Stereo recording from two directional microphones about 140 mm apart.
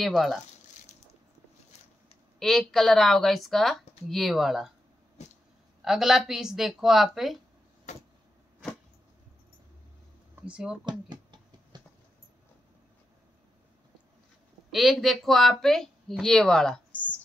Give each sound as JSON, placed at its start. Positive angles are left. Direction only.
{"t": 0.0, "sound": "speech", "side_deg": 0}
{"t": 2.3, "sound": "speech", "side_deg": 0}
{"t": 5.2, "sound": "a sound", "side_deg": 50}
{"t": 5.8, "sound": "speech", "side_deg": -5}
{"t": 7.9, "sound": "vehicle", "side_deg": 55}
{"t": 10.4, "sound": "speech", "side_deg": -5}
{"t": 10.9, "sound": "a sound", "side_deg": -30}
{"t": 14.7, "sound": "speech", "side_deg": 0}